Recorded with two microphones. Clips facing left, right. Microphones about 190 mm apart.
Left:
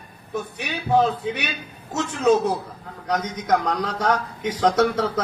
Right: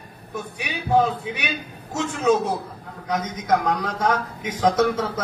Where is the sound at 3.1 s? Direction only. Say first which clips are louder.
Even; 10° right (ahead or behind).